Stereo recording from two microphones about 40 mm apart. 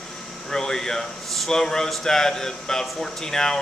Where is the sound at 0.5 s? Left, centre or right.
Centre.